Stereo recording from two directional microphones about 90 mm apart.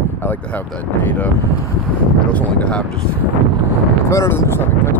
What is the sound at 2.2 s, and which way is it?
Speech, 15° left (ahead or behind).